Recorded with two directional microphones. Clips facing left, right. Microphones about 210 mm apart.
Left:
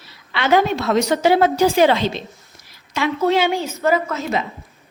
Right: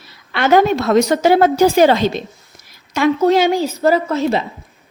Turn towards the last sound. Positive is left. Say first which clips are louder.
# right 4 dB
turn(degrees=-35)  # may be behind; listen again after turning